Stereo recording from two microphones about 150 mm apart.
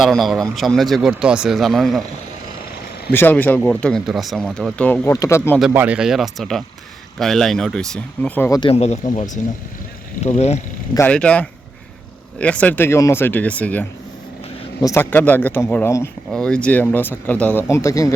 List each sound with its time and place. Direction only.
0.0 s speech: centre (ahead or behind)
3.1 s speech: 15° left (ahead or behind)
5.1 s speech: 20° left (ahead or behind)
5.7 s speech: 10° right (ahead or behind); by 8.4 s 5° left (ahead or behind)
8.4 s speech: 25° left (ahead or behind)
8.7 s speech: 45° left (ahead or behind)
9.1 s speech: 55° left (ahead or behind)
10.9 s speech: 10° left (ahead or behind)
14.8 s speech: 20° left (ahead or behind)
16.3 s speech: 5° left (ahead or behind)